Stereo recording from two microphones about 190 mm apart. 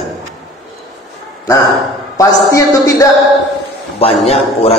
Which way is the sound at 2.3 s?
15° left (ahead or behind).